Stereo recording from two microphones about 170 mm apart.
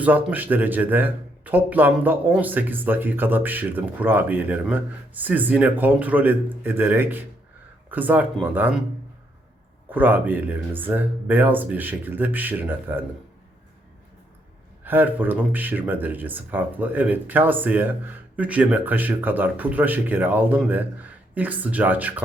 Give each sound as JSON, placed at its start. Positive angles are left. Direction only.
{"t": 0.0, "sound": "speech", "side_deg": -10}
{"t": 9.9, "sound": "speech", "side_deg": -10}
{"t": 14.8, "sound": "speech", "side_deg": -10}